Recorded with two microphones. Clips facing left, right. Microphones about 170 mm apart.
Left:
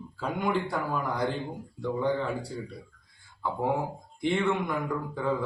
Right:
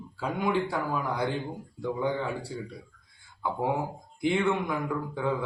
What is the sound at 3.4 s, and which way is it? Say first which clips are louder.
A man's voice: even; 5° right (ahead or behind).